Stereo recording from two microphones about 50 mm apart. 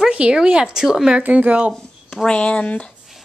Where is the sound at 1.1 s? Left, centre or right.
Right.